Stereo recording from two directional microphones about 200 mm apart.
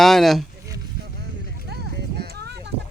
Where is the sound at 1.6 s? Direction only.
55° right (ahead or behind).